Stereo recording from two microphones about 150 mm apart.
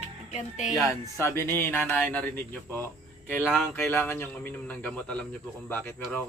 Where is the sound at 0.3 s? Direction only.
55° left (ahead or behind).